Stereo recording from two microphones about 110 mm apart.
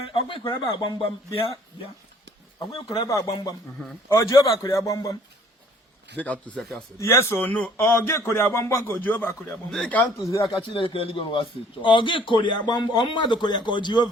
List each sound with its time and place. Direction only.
0.1 s a man's voice: 50° left (ahead or behind)
2.7 s a man's voice: 45° left (ahead or behind)
3.1 s a man's voice: 35° left (ahead or behind)
6.1 s a man's voice: 15° left (ahead or behind)
7.0 s speech: 25° left (ahead or behind)
9.6 s a man's voice: 5° left (ahead or behind)
10.2 s speech: 30° left (ahead or behind)
10.5 s a man's voice: 55° left (ahead or behind)